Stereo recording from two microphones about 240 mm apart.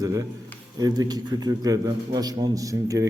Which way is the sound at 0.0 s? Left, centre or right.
Centre.